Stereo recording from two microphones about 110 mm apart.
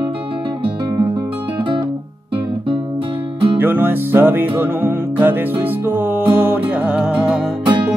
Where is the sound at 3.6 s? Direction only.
20° right (ahead or behind).